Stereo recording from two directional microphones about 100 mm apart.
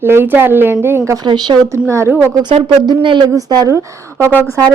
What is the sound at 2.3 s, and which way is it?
Speech, 45° right (ahead or behind).